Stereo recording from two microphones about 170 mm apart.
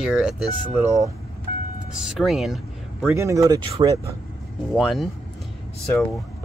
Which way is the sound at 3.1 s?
15° right (ahead or behind).